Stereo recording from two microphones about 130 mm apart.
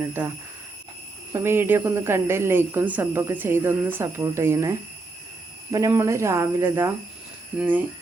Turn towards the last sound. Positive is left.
turn(degrees=-15)  # may be behind; listen again after turning